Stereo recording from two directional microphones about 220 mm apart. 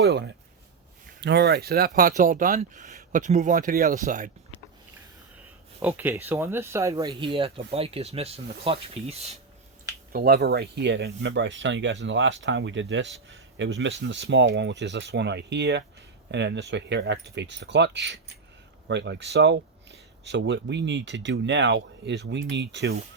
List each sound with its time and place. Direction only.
0.0 s speech: 50° right (ahead or behind)
5.8 s speech: 10° right (ahead or behind); by 9.4 s 30° right (ahead or behind)
10.1 s speech: 45° right (ahead or behind)